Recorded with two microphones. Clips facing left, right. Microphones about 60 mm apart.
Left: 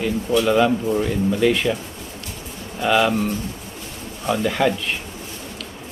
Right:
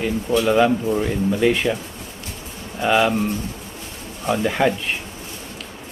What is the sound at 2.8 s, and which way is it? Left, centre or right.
Speech, centre.